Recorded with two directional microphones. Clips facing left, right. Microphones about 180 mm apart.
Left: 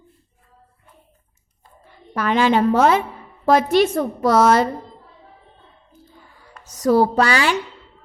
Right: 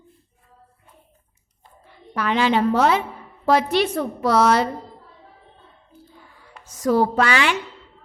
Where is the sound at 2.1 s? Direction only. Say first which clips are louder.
Left 3 dB; 45° left (ahead or behind).